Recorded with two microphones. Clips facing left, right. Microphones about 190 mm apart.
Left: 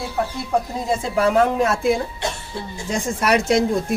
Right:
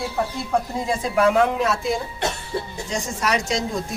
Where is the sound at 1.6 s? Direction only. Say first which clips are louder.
Left 4 dB; 55° left (ahead or behind).